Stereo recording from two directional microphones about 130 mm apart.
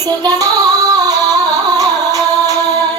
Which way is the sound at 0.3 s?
30° right (ahead or behind).